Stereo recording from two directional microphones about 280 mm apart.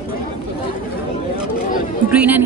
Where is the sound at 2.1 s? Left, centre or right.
Centre.